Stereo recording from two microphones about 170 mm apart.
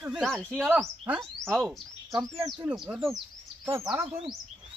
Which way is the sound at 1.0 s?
10° right (ahead or behind).